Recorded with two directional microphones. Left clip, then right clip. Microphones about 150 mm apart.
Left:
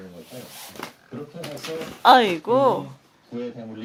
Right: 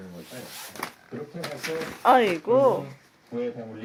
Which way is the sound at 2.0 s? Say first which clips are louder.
Left 4 dB; 15° left (ahead or behind).